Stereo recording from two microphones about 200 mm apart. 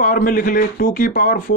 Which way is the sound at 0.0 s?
45° left (ahead or behind).